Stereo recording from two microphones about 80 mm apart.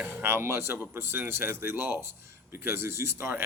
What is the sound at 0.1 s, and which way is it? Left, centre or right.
Speech, right.